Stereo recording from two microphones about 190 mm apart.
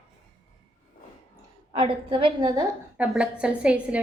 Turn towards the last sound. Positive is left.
turn(degrees=-5)  # may be behind; listen again after turning